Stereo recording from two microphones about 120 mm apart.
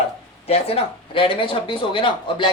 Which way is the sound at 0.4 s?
55° left (ahead or behind).